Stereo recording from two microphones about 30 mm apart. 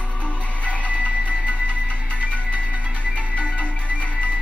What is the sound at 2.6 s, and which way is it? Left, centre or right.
Music, right.